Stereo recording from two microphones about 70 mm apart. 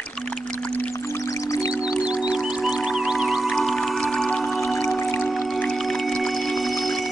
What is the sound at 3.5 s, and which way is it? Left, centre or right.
Music, centre.